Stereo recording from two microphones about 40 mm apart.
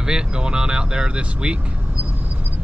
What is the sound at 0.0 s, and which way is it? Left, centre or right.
Speech, right.